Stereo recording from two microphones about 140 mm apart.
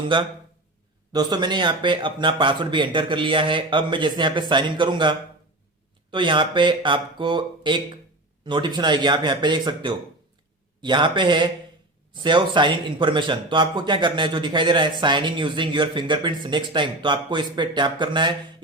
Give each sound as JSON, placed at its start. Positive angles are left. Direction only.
{"t": 0.0, "sound": "a man's voice", "side_deg": -35}